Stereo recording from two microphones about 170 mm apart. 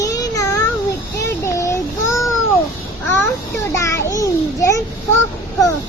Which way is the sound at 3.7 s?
20° left (ahead or behind).